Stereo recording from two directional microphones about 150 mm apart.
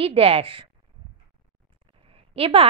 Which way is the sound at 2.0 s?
40° right (ahead or behind).